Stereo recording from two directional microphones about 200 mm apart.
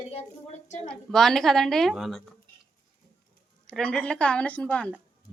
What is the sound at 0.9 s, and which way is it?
A woman's voice, centre (ahead or behind).